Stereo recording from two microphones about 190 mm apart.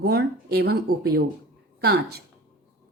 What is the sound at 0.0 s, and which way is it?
A woman's voice, 55° right (ahead or behind).